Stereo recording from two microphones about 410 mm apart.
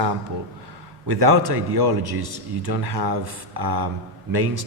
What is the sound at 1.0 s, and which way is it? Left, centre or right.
A man's voice, right.